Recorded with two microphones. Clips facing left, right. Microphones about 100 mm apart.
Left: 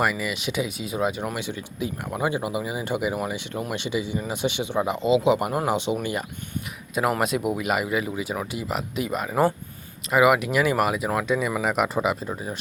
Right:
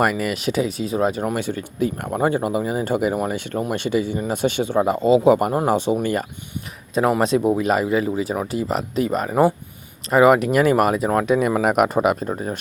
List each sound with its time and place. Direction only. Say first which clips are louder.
0.0 s speech: right 5 dB; 50° right (ahead or behind)
7.2 s speech: right 6 dB; 30° right (ahead or behind); by 11.9 s 50° right (ahead or behind)